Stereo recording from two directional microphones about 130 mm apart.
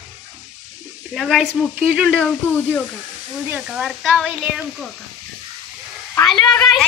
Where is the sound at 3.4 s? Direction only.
10° right (ahead or behind).